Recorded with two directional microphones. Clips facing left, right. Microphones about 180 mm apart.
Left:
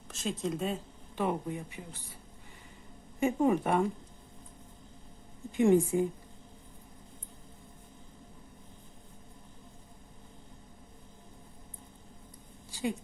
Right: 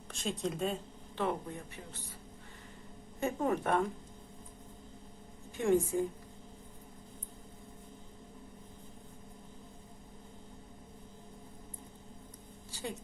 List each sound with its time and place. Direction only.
0.1 s a woman's voice: centre (ahead or behind)
1.1 s speech: 15° left (ahead or behind)
3.2 s speech: 15° left (ahead or behind)
5.5 s speech: 15° left (ahead or behind)
12.7 s a sound: 15° left (ahead or behind)